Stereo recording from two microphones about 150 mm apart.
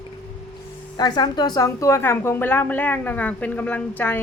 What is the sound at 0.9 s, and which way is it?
A woman's voice, 30° left (ahead or behind).